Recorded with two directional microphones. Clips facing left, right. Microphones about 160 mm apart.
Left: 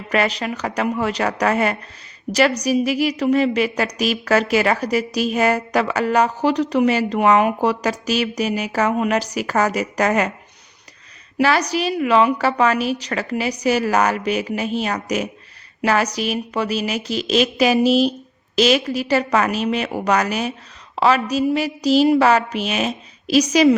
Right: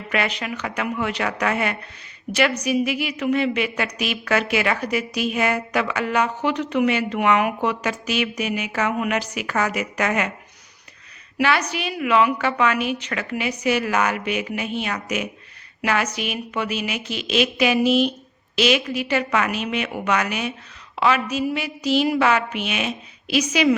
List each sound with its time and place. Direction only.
0.1 s a woman's voice: 35° left (ahead or behind)
11.3 s a woman's voice: 35° left (ahead or behind)